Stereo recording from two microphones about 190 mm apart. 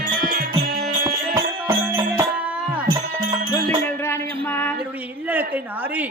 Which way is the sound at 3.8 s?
15° left (ahead or behind).